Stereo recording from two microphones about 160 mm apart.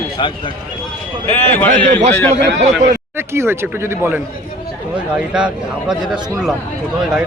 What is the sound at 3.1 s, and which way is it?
Speech, 15° right (ahead or behind).